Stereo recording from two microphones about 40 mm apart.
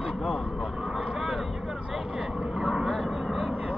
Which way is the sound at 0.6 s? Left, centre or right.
Centre.